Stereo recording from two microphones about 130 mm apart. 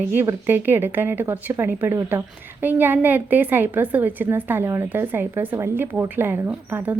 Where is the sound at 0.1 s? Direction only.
15° right (ahead or behind).